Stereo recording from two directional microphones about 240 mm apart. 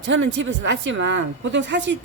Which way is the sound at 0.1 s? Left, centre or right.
Right.